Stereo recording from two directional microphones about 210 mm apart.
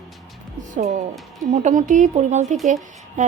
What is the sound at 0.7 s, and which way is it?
A woman's voice, 35° right (ahead or behind).